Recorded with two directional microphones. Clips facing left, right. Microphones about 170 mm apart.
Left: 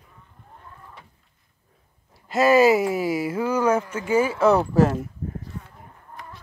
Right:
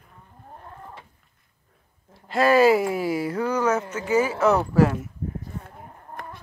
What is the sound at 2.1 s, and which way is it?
Speech, 10° left (ahead or behind).